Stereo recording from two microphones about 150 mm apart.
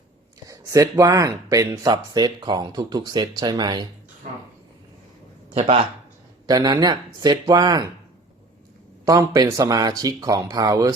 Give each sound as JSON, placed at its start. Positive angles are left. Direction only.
{"t": 0.4, "sound": "speech", "side_deg": -20}
{"t": 5.5, "sound": "speech", "side_deg": -45}
{"t": 6.5, "sound": "speech", "side_deg": -25}
{"t": 9.0, "sound": "speech", "side_deg": -25}